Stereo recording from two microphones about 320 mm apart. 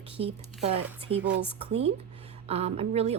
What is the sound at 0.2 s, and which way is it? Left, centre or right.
Speech, centre.